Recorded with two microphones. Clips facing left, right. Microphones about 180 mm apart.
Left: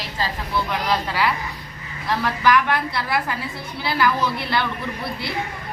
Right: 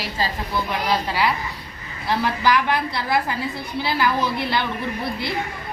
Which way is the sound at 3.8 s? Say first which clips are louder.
Left 1 dB; 15° right (ahead or behind).